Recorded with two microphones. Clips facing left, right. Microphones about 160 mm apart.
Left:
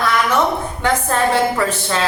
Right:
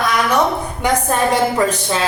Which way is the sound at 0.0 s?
15° right (ahead or behind).